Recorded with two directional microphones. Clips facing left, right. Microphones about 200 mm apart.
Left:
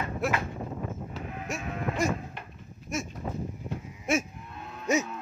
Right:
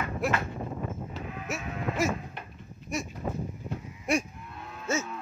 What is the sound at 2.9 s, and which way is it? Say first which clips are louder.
Speech: even; centre (ahead or behind).